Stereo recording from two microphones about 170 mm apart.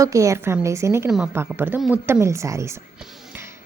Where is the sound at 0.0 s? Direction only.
20° right (ahead or behind).